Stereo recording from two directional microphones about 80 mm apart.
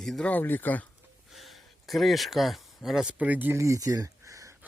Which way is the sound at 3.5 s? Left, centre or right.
Right.